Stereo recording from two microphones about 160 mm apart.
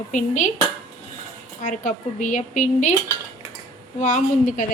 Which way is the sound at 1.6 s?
55° left (ahead or behind).